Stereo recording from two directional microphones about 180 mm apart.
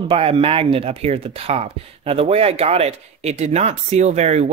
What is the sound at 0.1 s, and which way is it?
Speech, 30° right (ahead or behind).